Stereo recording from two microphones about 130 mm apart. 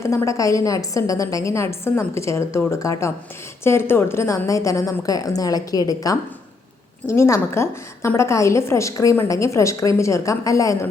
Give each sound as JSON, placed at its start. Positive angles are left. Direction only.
{"t": 0.0, "sound": "a woman's voice", "side_deg": 25}